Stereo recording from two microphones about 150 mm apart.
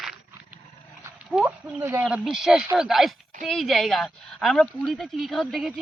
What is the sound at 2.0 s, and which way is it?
A woman's voice, 5° right (ahead or behind).